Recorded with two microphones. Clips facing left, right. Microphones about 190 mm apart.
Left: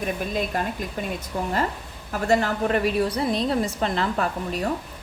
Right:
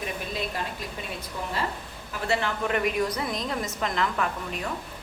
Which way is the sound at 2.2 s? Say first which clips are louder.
Left 6 dB; 40° left (ahead or behind).